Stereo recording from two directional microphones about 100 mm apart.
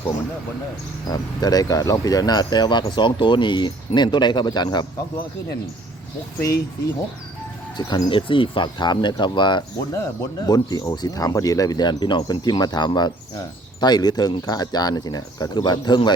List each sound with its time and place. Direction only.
1.1 s speech: 40° left (ahead or behind)
7.8 s speech: 45° left (ahead or behind)
9.9 s speech: 35° left (ahead or behind)